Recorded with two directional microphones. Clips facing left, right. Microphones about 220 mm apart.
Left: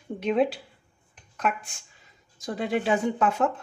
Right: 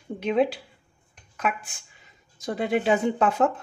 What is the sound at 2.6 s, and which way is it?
Speech, 20° right (ahead or behind).